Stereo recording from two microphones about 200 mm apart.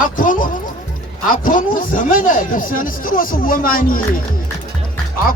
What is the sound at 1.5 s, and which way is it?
Speech, 40° left (ahead or behind).